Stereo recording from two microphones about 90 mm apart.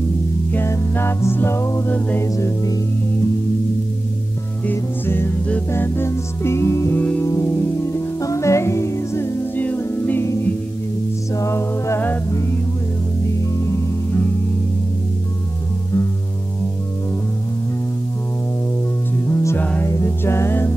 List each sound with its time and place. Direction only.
0.5 s music: 25° left (ahead or behind)
2.0 s music: 20° left (ahead or behind)
2.3 s music: 40° left (ahead or behind)
4.6 s music: 25° left (ahead or behind)
7.0 s music: 15° left (ahead or behind)
7.2 s music: 35° left (ahead or behind)
7.5 s music: 25° left (ahead or behind)
9.6 s music: 20° left (ahead or behind)
11.3 s music: 35° left (ahead or behind)
19.2 s music: 30° left (ahead or behind)